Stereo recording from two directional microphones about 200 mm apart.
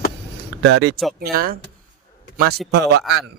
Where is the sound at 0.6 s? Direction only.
60° right (ahead or behind).